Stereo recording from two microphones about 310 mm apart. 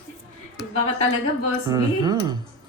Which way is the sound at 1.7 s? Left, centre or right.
Centre.